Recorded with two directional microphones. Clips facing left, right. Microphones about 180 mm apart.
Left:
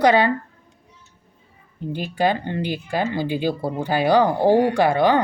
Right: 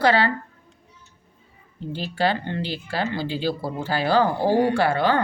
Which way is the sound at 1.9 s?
15° left (ahead or behind).